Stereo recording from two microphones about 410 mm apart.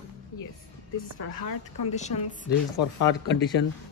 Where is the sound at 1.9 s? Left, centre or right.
Centre.